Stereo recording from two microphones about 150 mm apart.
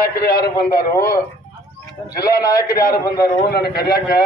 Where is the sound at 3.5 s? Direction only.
90° left.